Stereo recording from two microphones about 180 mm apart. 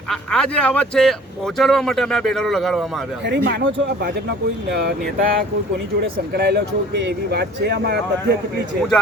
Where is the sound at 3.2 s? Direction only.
70° right (ahead or behind).